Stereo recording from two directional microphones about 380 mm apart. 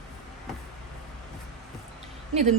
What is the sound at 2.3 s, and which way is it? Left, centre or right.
Speech, centre.